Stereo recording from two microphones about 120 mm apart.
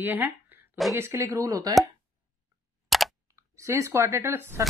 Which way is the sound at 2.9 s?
Centre (ahead or behind).